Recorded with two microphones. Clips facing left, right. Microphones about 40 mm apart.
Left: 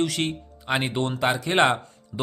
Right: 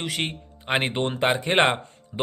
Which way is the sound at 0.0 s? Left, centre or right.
Right.